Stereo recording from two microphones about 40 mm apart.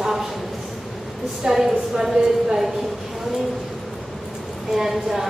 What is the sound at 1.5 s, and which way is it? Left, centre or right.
Speech, centre.